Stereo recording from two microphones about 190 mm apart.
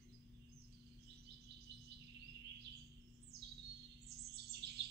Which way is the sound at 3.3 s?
55° right (ahead or behind).